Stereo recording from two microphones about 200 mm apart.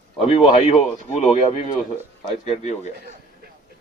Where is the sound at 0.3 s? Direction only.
30° left (ahead or behind).